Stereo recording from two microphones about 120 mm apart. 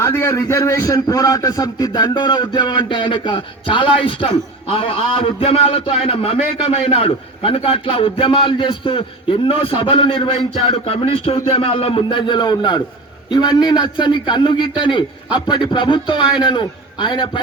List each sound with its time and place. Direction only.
0.0 s a man's voice: 15° left (ahead or behind); by 10.6 s 40° left (ahead or behind)
10.7 s a man's voice: 55° left (ahead or behind)
16.1 s a man's voice: 10° right (ahead or behind)
16.4 s a man's voice: 40° left (ahead or behind)